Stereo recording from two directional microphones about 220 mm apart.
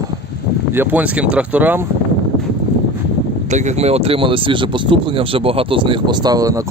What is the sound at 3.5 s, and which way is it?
Speech, 30° right (ahead or behind).